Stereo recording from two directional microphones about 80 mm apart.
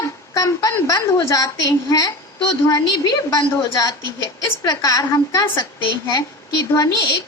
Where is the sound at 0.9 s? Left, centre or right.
Left.